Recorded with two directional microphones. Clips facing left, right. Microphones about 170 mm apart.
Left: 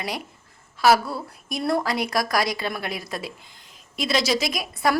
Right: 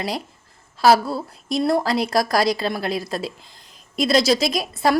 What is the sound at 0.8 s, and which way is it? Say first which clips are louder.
A woman's voice: right 3 dB; 30° right (ahead or behind).